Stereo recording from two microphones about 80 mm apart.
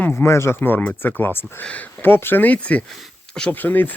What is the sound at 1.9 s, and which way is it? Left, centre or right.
Speech, left.